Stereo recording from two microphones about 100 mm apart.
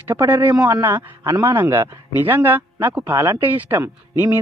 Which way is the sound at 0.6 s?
40° right (ahead or behind).